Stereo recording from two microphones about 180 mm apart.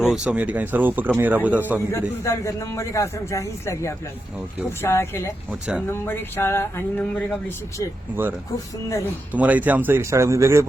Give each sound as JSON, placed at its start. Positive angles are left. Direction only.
{"t": 0.0, "sound": "speech", "side_deg": -5}
{"t": 1.9, "sound": "a man's voice", "side_deg": 15}
{"t": 5.5, "sound": "speech", "side_deg": -5}
{"t": 5.9, "sound": "a man's voice", "side_deg": 10}
{"t": 9.3, "sound": "speech", "side_deg": -10}